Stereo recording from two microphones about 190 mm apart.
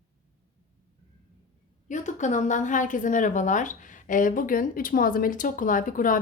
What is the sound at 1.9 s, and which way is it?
A woman's voice, 40° left (ahead or behind).